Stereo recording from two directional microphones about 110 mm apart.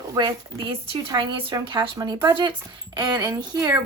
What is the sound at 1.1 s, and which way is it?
Speech, 40° right (ahead or behind).